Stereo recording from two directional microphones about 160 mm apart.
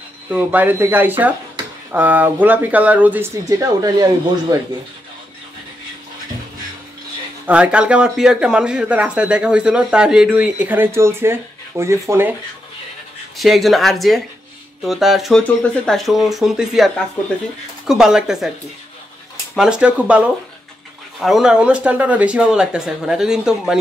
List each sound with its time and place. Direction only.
0.3 s speech: 10° right (ahead or behind)
3.4 s speech: 20° right (ahead or behind)
7.4 s speech: 10° right (ahead or behind)
13.4 s speech: centre (ahead or behind)
19.5 s speech: 5° right (ahead or behind)